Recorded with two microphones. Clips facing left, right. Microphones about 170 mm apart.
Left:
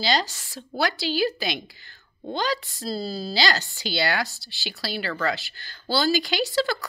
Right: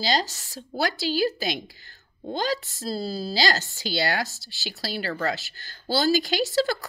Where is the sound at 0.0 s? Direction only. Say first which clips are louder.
Left 1 dB; 40° right (ahead or behind).